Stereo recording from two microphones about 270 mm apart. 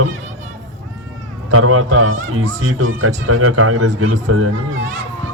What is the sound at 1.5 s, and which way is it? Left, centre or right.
Speech, right.